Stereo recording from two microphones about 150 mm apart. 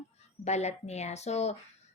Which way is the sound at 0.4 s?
45° left (ahead or behind).